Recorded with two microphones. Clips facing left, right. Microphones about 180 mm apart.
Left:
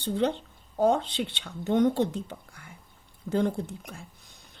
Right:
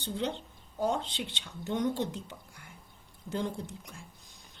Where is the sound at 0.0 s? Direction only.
60° left (ahead or behind).